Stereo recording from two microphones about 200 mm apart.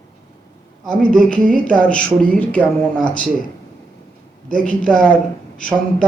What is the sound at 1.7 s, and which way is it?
Speech, 5° left (ahead or behind).